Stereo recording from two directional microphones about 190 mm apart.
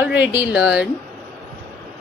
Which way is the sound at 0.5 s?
5° right (ahead or behind).